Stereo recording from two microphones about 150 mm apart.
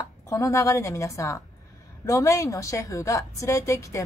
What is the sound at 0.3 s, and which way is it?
A woman's voice, 20° left (ahead or behind).